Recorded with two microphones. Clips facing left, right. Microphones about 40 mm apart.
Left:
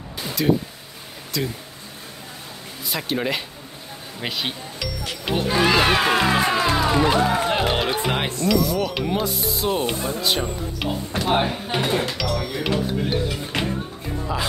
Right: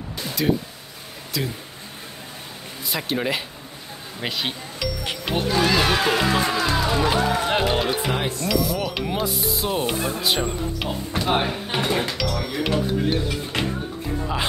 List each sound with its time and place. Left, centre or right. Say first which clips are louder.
0.2 s music: left 1 dB; centre
1.3 s stir: left 1 dB; centre
2.9 s stir: even; centre
4.2 s speech: even; centre
5.5 s speech: left 2 dB; centre
7.0 s speech: left 2 dB; centre
7.6 s stir: even; centre
9.9 s speech: right 1 dB; right
10.2 s stir: even; centre
11.1 s speech: left 1 dB; centre
12.2 s stir: even; centre
13.5 s music: even; centre